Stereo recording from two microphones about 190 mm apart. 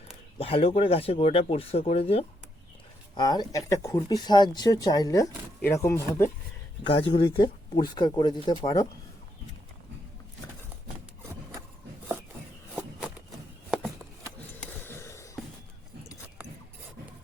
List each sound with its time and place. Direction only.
0.3 s speech: 30° left (ahead or behind)
3.2 s speech: 20° left (ahead or behind)
6.8 s speech: 30° left (ahead or behind)
14.8 s a sound: 15° left (ahead or behind)